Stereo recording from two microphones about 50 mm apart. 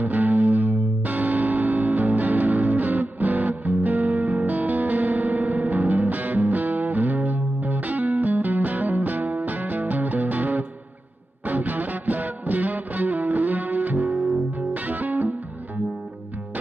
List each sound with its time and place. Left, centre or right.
0.0 s music: right